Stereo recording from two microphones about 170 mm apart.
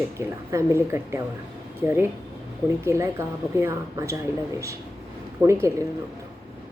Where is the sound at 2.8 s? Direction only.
15° right (ahead or behind).